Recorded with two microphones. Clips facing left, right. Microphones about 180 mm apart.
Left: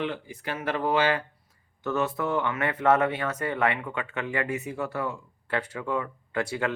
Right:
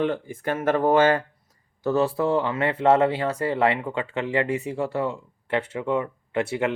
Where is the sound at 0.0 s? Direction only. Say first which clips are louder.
Right 7 dB; 50° right (ahead or behind).